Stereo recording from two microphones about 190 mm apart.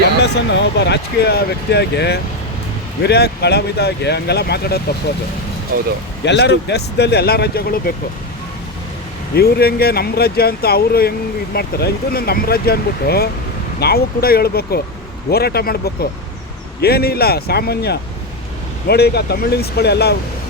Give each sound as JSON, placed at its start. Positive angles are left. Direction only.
{"t": 0.2, "sound": "speech", "side_deg": 65}
{"t": 6.2, "sound": "speech", "side_deg": 65}
{"t": 9.3, "sound": "speech", "side_deg": 55}
{"t": 16.8, "sound": "speech", "side_deg": 55}